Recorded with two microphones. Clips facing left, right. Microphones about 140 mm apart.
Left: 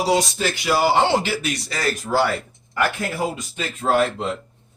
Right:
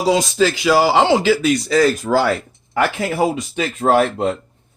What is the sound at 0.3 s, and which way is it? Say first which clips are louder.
Speech: right 7 dB; 90° right.